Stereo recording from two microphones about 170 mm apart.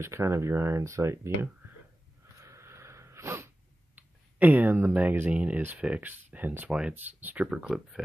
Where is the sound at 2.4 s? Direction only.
15° right (ahead or behind).